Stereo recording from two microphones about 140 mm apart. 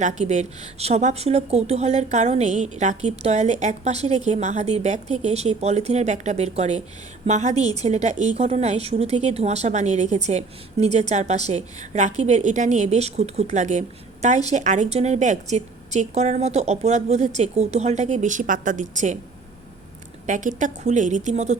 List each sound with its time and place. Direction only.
0.0 s a woman's voice: 55° right (ahead or behind)
20.2 s a woman's voice: 65° right (ahead or behind)